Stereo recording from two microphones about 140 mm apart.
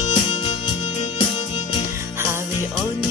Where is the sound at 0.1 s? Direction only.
40° left (ahead or behind).